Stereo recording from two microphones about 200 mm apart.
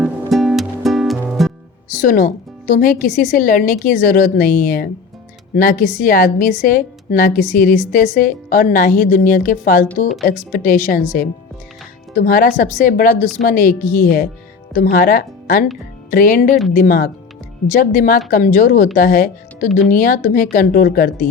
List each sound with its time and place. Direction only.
0.0 s music: centre (ahead or behind)
2.0 s a woman's voice: 45° left (ahead or behind)
12.1 s a woman's voice: 45° left (ahead or behind)